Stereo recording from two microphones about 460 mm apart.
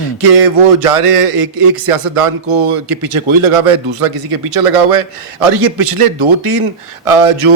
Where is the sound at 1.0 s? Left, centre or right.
Right.